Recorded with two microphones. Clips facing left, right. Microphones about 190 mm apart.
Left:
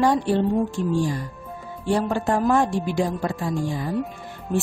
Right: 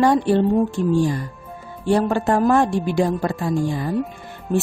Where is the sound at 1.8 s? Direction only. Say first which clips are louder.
Right 4 dB; 60° right (ahead or behind).